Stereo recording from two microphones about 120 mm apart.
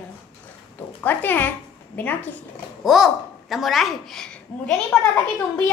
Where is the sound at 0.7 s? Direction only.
15° left (ahead or behind).